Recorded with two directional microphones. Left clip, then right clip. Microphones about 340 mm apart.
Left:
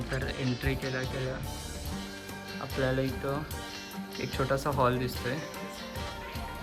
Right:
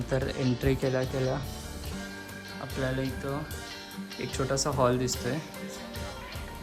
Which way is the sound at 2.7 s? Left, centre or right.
Centre.